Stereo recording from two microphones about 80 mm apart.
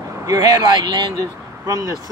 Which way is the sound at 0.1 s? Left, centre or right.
Right.